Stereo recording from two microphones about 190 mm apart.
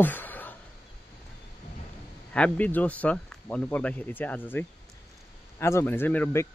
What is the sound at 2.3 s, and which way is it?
Speech, 5° left (ahead or behind).